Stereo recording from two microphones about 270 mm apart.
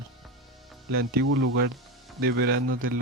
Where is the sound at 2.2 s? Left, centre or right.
Right.